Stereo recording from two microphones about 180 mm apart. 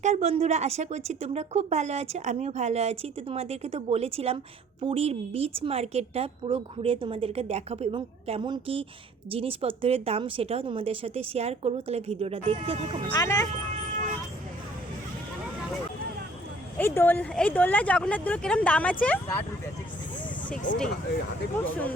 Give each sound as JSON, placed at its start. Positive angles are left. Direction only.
{"t": 0.0, "sound": "a woman's voice", "side_deg": -40}
{"t": 13.1, "sound": "speech", "side_deg": 20}
{"t": 16.7, "sound": "speech", "side_deg": 10}
{"t": 20.5, "sound": "speech", "side_deg": 45}
{"t": 21.6, "sound": "speech", "side_deg": 10}